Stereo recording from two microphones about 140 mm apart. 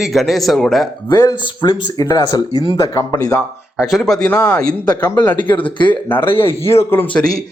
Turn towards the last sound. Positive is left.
turn(degrees=15)  # may be behind; listen again after turning